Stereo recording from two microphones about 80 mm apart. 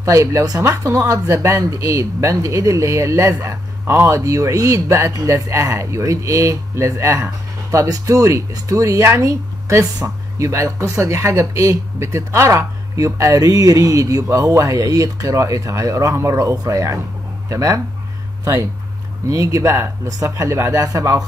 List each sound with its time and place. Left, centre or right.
0.0 s speech: right
4.2 s speech: right